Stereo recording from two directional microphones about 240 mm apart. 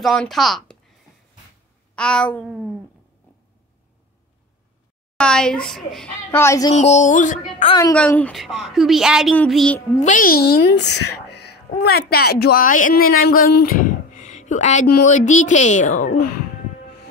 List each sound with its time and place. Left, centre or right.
0.0 s speech: centre
2.0 s a woman's voice: centre
5.1 s a woman's voice: centre
6.7 s speech: left
7.7 s a woman's voice: centre
9.8 s a child's voice: left
13.6 s a sound: left
15.0 s speech: left